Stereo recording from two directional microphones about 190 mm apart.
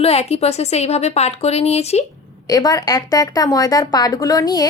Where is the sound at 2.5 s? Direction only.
20° left (ahead or behind).